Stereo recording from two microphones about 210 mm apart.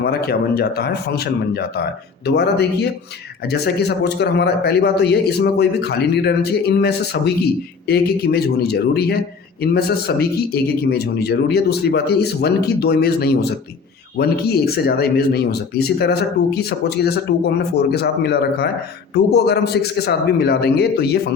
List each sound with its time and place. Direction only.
0.0 s a man's voice: 45° left (ahead or behind)